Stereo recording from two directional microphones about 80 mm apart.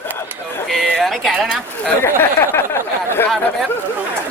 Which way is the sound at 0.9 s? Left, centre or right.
Centre.